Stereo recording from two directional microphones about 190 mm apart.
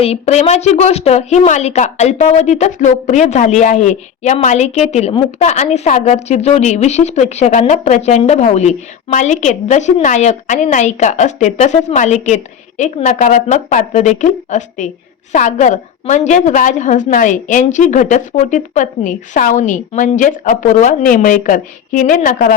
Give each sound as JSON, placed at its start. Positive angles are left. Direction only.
{"t": 0.0, "sound": "a woman's voice", "side_deg": 35}